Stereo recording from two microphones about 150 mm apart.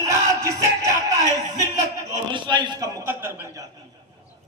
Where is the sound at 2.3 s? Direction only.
30° right (ahead or behind).